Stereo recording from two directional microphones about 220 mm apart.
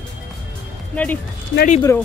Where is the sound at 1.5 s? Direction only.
35° left (ahead or behind).